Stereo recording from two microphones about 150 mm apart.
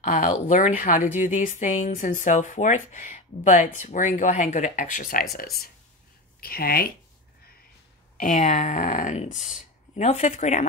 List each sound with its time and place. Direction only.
0.0 s speech: 60° left (ahead or behind)
5.3 s speech: 90° left
8.2 s speech: 55° left (ahead or behind)